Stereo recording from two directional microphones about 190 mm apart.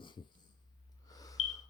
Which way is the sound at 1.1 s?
20° left (ahead or behind).